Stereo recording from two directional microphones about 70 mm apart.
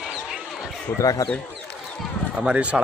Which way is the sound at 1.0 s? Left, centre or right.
Left.